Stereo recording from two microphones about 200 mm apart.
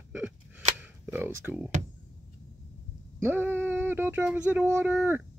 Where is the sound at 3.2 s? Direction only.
10° right (ahead or behind).